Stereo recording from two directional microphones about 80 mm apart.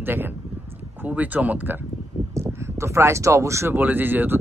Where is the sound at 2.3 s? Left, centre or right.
Right.